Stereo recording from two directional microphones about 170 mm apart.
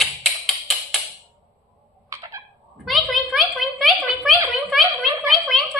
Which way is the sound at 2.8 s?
Centre (ahead or behind).